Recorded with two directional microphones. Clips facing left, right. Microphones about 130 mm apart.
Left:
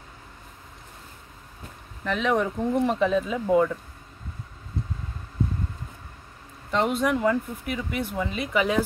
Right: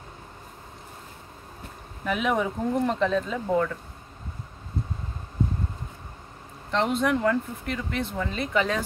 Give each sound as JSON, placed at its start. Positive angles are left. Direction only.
{"t": 2.0, "sound": "speech", "side_deg": -5}
{"t": 6.7, "sound": "speech", "side_deg": 5}